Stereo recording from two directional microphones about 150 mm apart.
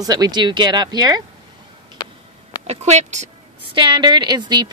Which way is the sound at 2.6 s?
45° right (ahead or behind).